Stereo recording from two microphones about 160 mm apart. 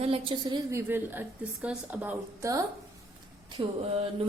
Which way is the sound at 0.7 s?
15° right (ahead or behind).